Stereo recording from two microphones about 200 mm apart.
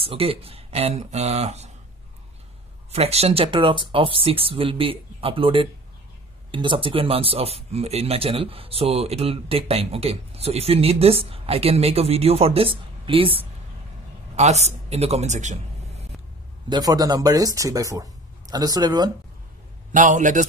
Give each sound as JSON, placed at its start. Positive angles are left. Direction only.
{"t": 0.0, "sound": "speech", "side_deg": -25}
{"t": 2.9, "sound": "speech", "side_deg": -30}
{"t": 16.6, "sound": "speech", "side_deg": -20}
{"t": 19.9, "sound": "speech", "side_deg": -40}